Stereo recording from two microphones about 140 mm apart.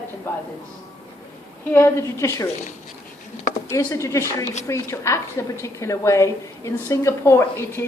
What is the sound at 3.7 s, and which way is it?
A woman's voice, 20° left (ahead or behind).